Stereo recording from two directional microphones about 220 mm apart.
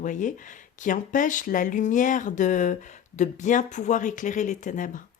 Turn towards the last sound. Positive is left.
turn(degrees=35)  # may be behind; listen again after turning